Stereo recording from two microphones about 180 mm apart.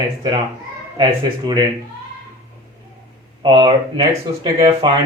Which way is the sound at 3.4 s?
25° right (ahead or behind).